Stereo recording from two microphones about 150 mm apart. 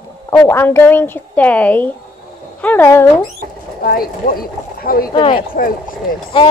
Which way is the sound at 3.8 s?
75° left (ahead or behind).